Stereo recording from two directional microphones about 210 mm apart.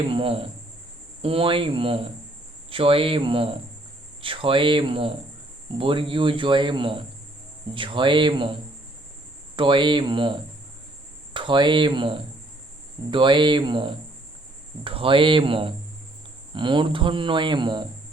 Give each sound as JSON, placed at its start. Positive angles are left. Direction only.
{"t": 0.1, "sound": "speech", "side_deg": -25}
{"t": 9.6, "sound": "speech", "side_deg": -25}